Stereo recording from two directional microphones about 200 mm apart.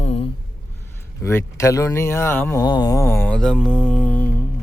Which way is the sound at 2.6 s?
20° left (ahead or behind).